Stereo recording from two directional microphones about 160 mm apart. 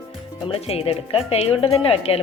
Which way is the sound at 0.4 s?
40° left (ahead or behind).